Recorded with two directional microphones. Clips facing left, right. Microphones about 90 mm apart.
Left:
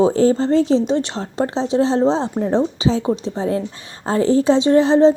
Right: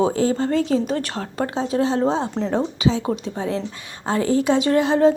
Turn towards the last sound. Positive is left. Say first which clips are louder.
# left 4 dB
turn(degrees=30)  # may be behind; listen again after turning